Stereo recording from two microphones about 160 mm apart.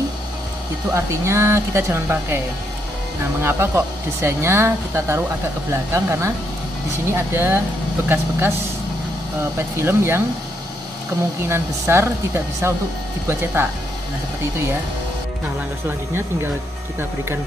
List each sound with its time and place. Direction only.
0.9 s speech: 20° right (ahead or behind)
3.4 s speech: 15° right (ahead or behind)
9.6 s speech: 15° right (ahead or behind)
11.4 s speech: 15° right (ahead or behind)